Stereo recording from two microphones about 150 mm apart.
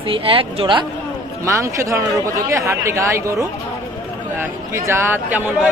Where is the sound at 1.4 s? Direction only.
20° right (ahead or behind).